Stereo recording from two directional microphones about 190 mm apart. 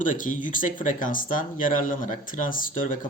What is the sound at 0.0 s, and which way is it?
Speech, 45° left (ahead or behind).